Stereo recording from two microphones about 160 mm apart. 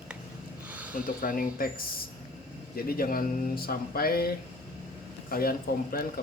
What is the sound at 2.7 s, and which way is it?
Speech, 65° left (ahead or behind).